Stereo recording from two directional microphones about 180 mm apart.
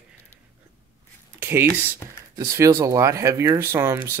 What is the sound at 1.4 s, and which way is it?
Speech, 10° right (ahead or behind).